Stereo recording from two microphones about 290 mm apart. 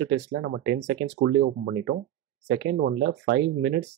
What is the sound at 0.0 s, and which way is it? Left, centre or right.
Speech, right.